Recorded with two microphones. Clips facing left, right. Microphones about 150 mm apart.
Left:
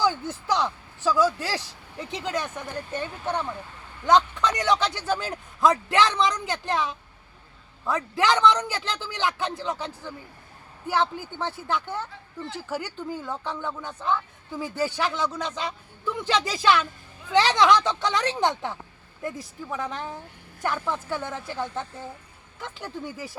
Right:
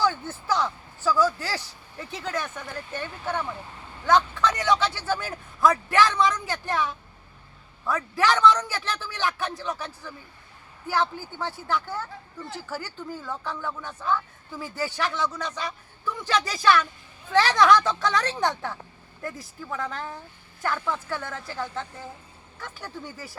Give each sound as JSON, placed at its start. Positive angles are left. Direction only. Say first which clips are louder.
{"t": 0.0, "sound": "speech", "louder": "left 1 dB", "side_deg": 15}
{"t": 21.3, "sound": "a woman's voice", "louder": "left 2 dB", "side_deg": 5}
{"t": 22.6, "sound": "speech", "louder": "left 3 dB", "side_deg": 20}